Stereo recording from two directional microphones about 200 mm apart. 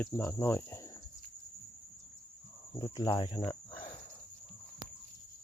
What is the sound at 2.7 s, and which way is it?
Speech, 20° left (ahead or behind).